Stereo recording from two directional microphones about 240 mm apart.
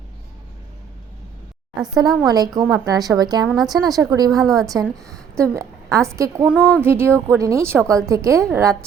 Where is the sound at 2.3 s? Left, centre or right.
Centre.